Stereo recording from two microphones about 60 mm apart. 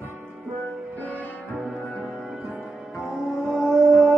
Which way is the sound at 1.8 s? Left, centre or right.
Centre.